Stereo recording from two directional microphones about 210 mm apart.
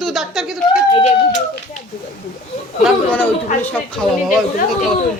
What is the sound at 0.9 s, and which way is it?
Speech, 25° left (ahead or behind).